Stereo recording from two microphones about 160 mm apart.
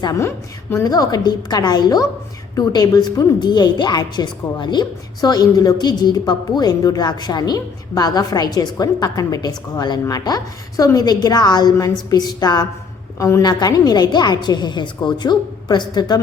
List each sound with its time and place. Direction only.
0.0 s a woman's voice: 20° left (ahead or behind)